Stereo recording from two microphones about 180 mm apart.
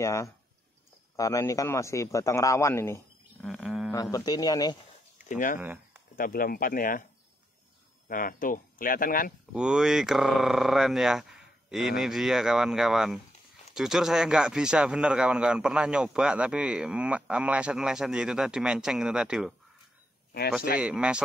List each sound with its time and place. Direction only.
0.0 s a man's voice: 15° left (ahead or behind)
3.4 s speech: centre (ahead or behind)
3.9 s speech: 20° left (ahead or behind)
5.3 s speech: 50° left (ahead or behind)
8.1 s speech: 50° left (ahead or behind)
9.5 s speech: 5° right (ahead or behind)
20.8 s speech: 5° right (ahead or behind)